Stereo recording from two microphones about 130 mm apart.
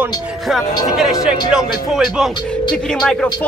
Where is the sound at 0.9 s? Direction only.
5° right (ahead or behind).